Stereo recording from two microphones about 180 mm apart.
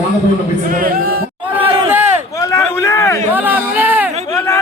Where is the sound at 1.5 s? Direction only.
10° right (ahead or behind).